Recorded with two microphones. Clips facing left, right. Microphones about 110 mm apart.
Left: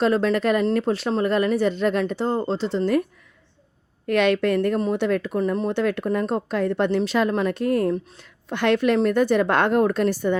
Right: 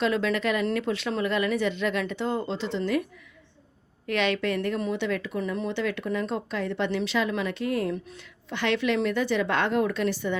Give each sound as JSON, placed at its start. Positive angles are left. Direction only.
{"t": 0.0, "sound": "speech", "side_deg": 40}
{"t": 4.0, "sound": "speech", "side_deg": 50}